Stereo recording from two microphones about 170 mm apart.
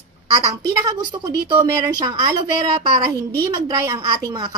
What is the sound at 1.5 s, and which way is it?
A woman's voice, 25° right (ahead or behind).